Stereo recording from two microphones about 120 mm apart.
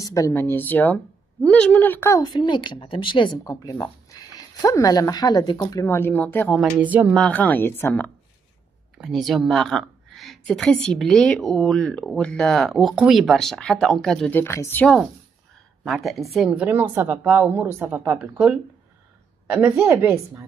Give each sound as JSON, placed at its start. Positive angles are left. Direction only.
{"t": 0.0, "sound": "speech", "side_deg": 30}
{"t": 6.8, "sound": "a woman's voice", "side_deg": -15}
{"t": 7.2, "sound": "speech", "side_deg": 10}
{"t": 8.9, "sound": "speech", "side_deg": 0}
{"t": 14.3, "sound": "speech", "side_deg": 20}
{"t": 15.8, "sound": "a woman's voice", "side_deg": 0}